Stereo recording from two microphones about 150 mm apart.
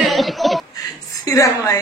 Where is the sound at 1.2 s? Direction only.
20° left (ahead or behind).